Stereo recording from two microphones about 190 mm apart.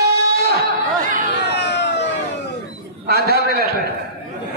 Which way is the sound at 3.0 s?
55° right (ahead or behind).